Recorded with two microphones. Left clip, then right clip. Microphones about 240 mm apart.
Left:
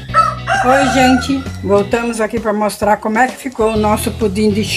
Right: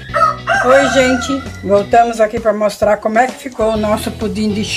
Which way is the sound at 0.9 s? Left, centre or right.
Centre.